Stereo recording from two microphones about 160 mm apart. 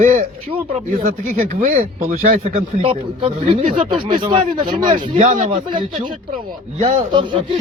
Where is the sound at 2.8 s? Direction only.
35° right (ahead or behind).